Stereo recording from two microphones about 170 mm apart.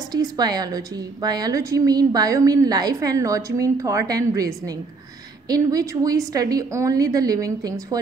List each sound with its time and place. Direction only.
0.1 s a woman's voice: 25° right (ahead or behind)